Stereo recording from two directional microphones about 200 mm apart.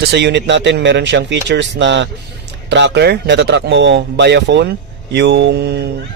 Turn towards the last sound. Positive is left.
turn(degrees=-60)  # may be behind; listen again after turning